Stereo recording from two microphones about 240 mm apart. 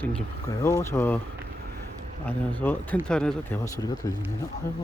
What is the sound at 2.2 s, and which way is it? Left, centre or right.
Speech, centre.